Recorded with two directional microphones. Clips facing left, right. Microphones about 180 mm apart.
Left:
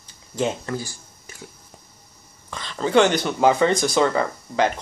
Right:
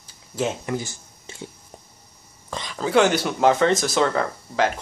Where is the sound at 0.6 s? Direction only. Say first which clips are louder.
Right 1 dB; 20° right (ahead or behind).